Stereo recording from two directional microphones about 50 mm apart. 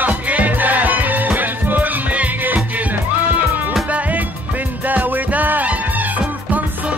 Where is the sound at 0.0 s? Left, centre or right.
Right.